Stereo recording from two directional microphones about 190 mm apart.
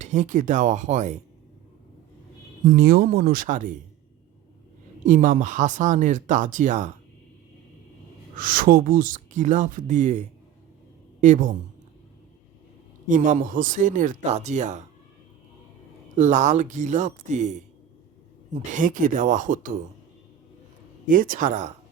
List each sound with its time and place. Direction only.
0.0 s speech: 40° right (ahead or behind)
2.6 s speech: 50° right (ahead or behind)
5.0 s speech: 45° right (ahead or behind)
8.4 s speech: 50° right (ahead or behind)
11.2 s speech: 40° right (ahead or behind)
13.1 s speech: 45° right (ahead or behind)
16.1 s speech: 40° right (ahead or behind)
18.7 s speech: 45° right (ahead or behind)
21.1 s speech: 45° right (ahead or behind)